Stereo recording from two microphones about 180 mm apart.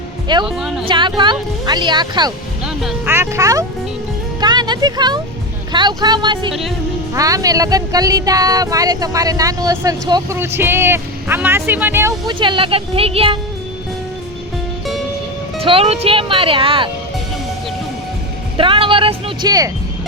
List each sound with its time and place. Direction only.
0.4 s speech: centre (ahead or behind)
0.9 s speech: 25° right (ahead or behind)
4.4 s music: 25° right (ahead or behind)
5.7 s speech: 25° right (ahead or behind)
6.5 s speech: centre (ahead or behind)
7.1 s speech: 20° right (ahead or behind)
12.3 s speech: 25° right (ahead or behind)
15.6 s speech: 30° right (ahead or behind)
18.5 s speech: 30° right (ahead or behind)